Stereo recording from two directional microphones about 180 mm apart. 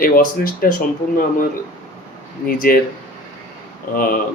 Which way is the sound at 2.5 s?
50° left (ahead or behind).